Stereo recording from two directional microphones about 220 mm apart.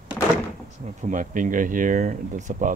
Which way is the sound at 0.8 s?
35° right (ahead or behind).